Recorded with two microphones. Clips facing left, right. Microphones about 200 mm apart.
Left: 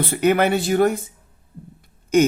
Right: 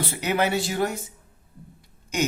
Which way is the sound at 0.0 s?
55° left (ahead or behind).